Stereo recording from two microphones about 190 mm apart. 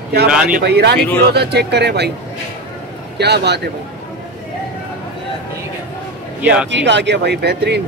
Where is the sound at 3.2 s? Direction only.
60° right (ahead or behind).